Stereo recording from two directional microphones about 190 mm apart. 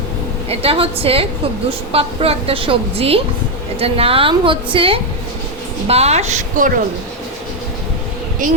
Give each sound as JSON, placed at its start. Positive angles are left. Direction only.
{"t": 0.6, "sound": "a woman's voice", "side_deg": -30}
{"t": 8.4, "sound": "speech", "side_deg": -45}